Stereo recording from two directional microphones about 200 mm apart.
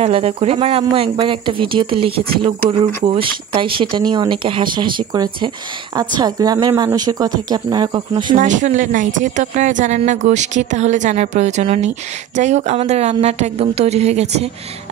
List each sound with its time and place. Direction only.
0.0 s speech: 30° right (ahead or behind)
8.4 s a woman's voice: 40° right (ahead or behind)